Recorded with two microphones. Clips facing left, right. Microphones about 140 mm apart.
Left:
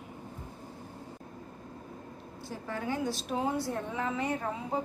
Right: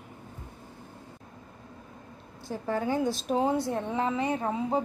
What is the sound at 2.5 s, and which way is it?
A woman's voice, 30° right (ahead or behind).